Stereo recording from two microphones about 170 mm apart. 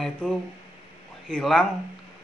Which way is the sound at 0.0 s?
5° left (ahead or behind).